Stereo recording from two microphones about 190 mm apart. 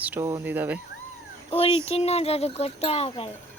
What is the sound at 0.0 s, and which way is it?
Speech, 10° right (ahead or behind).